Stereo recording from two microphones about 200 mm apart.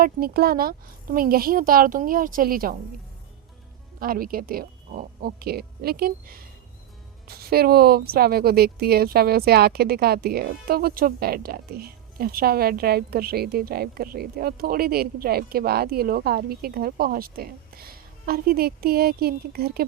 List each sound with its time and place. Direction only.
0.0 s speech: 50° right (ahead or behind)
4.0 s speech: 45° right (ahead or behind)